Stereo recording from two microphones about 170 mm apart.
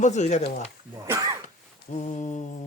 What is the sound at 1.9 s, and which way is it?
Speech, 45° left (ahead or behind).